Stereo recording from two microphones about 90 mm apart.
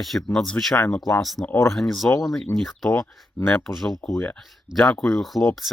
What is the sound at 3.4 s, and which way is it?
Speech, 25° left (ahead or behind).